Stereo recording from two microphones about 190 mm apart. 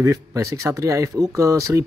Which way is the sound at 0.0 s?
15° right (ahead or behind).